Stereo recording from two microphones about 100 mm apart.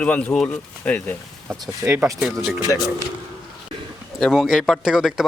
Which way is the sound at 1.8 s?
15° right (ahead or behind).